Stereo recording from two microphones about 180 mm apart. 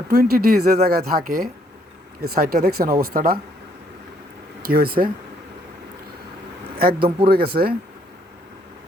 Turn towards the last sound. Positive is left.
turn(degrees=-60)  # may be behind; listen again after turning